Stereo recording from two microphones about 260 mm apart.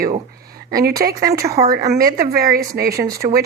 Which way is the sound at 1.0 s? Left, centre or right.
Right.